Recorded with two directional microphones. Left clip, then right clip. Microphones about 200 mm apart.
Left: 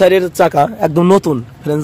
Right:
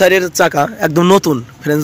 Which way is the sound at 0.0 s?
Centre (ahead or behind).